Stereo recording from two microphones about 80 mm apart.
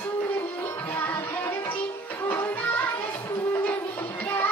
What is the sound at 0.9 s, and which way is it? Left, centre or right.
Music, left.